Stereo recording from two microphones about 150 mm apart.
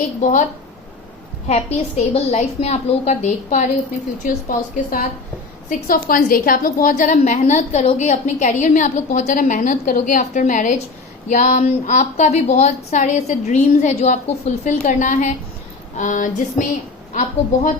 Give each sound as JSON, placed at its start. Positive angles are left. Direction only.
{"t": 0.2, "sound": "a woman's voice", "side_deg": 55}
{"t": 1.5, "sound": "a woman's voice", "side_deg": 45}
{"t": 4.2, "sound": "a woman's voice", "side_deg": 70}
{"t": 6.8, "sound": "a woman's voice", "side_deg": 60}
{"t": 16.0, "sound": "a sound", "side_deg": 55}